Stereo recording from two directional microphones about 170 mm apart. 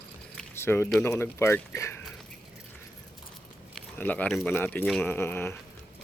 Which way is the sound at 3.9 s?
10° left (ahead or behind).